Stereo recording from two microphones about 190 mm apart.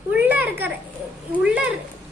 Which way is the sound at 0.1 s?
10° right (ahead or behind).